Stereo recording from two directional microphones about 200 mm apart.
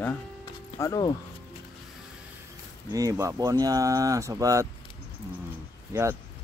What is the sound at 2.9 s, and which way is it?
Speech, 15° right (ahead or behind).